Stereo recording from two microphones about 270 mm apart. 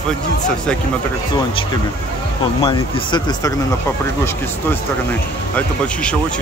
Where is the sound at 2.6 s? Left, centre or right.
Centre.